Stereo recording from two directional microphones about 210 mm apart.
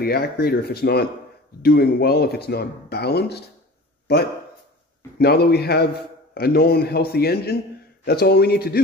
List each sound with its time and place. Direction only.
0.0 s speech: 45° left (ahead or behind)